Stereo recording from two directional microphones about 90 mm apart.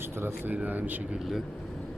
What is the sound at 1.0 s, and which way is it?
Speech, 5° right (ahead or behind).